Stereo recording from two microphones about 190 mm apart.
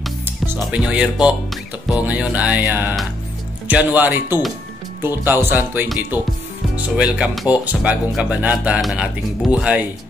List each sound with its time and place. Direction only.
0.2 s speech: 10° right (ahead or behind)